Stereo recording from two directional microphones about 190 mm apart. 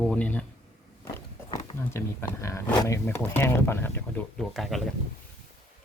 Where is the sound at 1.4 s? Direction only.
30° left (ahead or behind).